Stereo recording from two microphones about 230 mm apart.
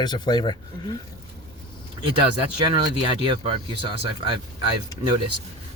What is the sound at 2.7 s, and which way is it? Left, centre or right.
Speech, right.